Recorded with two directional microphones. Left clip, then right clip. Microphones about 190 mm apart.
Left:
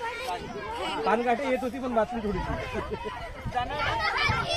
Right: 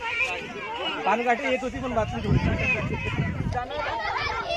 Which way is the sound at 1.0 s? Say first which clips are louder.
Right 2 dB; 55° left (ahead or behind).